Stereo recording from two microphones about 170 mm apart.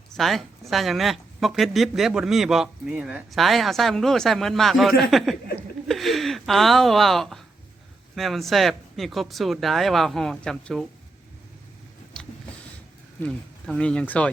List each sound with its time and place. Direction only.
0.2 s speech: centre (ahead or behind)
12.1 s vehicle: 5° left (ahead or behind)
13.2 s speech: 5° left (ahead or behind)